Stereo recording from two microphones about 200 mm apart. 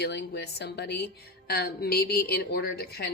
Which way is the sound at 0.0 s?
55° left (ahead or behind).